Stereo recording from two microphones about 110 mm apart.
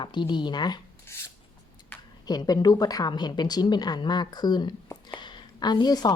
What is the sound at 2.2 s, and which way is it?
A woman's voice, 35° left (ahead or behind).